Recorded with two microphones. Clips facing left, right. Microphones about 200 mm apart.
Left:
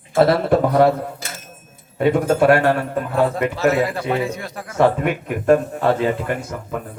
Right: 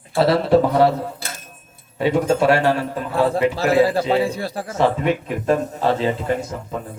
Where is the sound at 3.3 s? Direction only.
30° right (ahead or behind).